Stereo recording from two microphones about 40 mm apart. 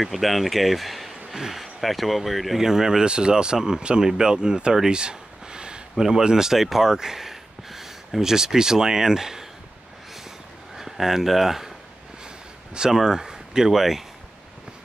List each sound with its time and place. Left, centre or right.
0.0 s speech: centre
2.6 s speech: centre
4.9 s a sound: right
6.0 s speech: centre
10.8 s speech: centre
12.7 s speech: centre